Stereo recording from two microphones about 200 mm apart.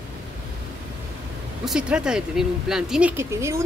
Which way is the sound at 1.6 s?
5° right (ahead or behind).